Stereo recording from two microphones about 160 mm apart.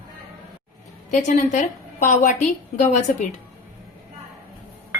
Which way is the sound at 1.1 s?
50° left (ahead or behind).